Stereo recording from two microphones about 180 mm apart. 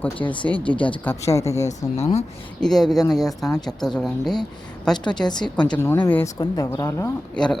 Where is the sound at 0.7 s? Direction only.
30° left (ahead or behind).